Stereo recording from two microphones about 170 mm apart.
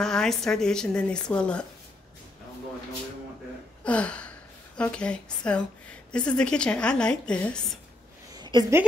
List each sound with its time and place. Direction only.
0.0 s a woman's voice: 5° left (ahead or behind)
3.8 s gasp: 5° left (ahead or behind)
4.7 s a woman's voice: 5° left (ahead or behind)
8.4 s a sound: 25° right (ahead or behind)